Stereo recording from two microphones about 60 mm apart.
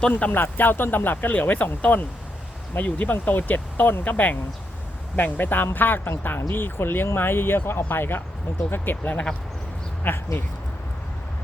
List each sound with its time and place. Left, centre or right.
0.2 s speech: left